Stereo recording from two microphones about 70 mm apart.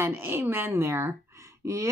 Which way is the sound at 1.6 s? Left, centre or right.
Right.